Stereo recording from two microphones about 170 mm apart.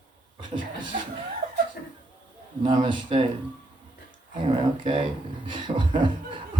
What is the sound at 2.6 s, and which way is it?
Speech, 30° right (ahead or behind).